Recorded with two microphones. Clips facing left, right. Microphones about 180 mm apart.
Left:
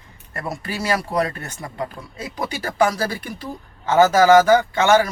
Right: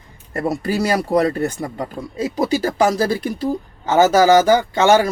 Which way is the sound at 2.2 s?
35° right (ahead or behind).